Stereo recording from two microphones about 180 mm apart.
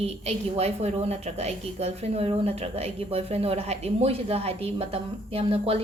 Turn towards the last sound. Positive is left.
turn(degrees=-30)  # may be behind; listen again after turning